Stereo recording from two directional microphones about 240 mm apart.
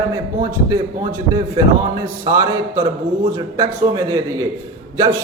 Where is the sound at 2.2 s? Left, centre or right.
Centre.